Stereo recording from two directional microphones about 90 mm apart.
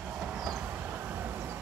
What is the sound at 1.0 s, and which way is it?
Vehicle, 20° right (ahead or behind).